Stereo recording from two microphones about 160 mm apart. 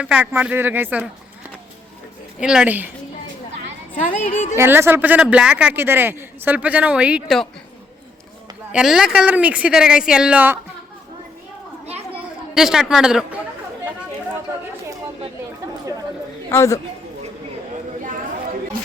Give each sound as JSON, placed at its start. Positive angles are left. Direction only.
{"t": 0.0, "sound": "a man's voice", "side_deg": -10}
{"t": 2.4, "sound": "a man's voice", "side_deg": -5}
{"t": 4.5, "sound": "a man's voice", "side_deg": -15}
{"t": 8.7, "sound": "speech", "side_deg": -5}
{"t": 12.1, "sound": "chatter", "side_deg": -5}
{"t": 16.5, "sound": "speech", "side_deg": 20}